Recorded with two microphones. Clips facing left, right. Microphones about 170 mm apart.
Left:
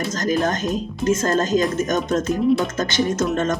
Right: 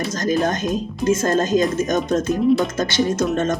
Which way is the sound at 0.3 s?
20° right (ahead or behind).